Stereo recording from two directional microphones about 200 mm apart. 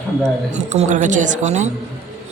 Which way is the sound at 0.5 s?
35° right (ahead or behind).